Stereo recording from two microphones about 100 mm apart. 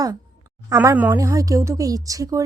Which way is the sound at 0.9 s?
15° right (ahead or behind).